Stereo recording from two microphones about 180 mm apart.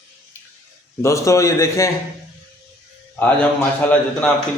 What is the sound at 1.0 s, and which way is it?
Speech, 15° left (ahead or behind).